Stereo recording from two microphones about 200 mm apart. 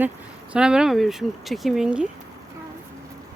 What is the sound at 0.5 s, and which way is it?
Speech, 5° right (ahead or behind).